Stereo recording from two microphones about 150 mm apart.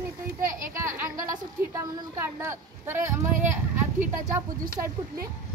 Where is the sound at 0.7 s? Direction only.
20° right (ahead or behind).